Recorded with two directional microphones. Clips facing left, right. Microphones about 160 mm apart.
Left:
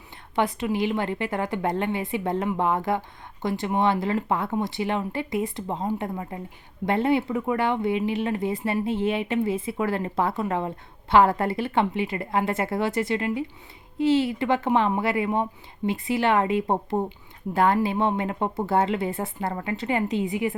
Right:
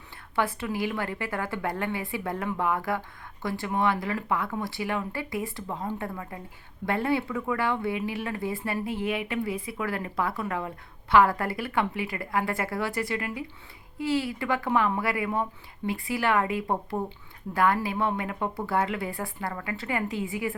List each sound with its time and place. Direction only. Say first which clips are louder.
0.3 s speech: left 4 dB; 20° left (ahead or behind)